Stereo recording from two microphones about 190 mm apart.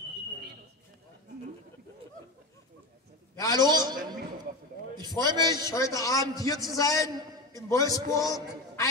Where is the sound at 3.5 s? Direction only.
20° right (ahead or behind).